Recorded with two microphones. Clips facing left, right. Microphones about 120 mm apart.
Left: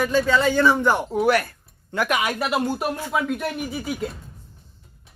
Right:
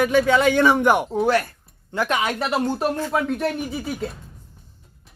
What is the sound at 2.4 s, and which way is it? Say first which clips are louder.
Speech: right 1 dB; 5° left (ahead or behind).